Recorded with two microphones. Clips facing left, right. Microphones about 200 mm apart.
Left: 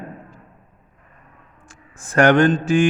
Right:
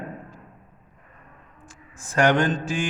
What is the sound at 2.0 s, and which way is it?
Speech, 60° left (ahead or behind).